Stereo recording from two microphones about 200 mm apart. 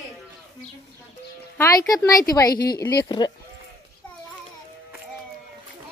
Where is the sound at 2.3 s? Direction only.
20° left (ahead or behind).